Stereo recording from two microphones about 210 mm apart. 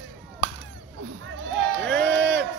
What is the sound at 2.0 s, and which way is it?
Run, 10° left (ahead or behind).